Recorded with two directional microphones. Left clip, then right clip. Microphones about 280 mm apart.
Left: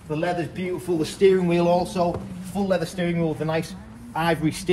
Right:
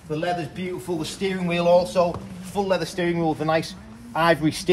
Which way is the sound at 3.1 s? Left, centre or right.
Right.